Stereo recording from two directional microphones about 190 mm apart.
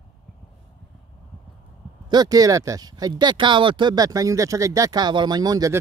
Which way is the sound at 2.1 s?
20° right (ahead or behind).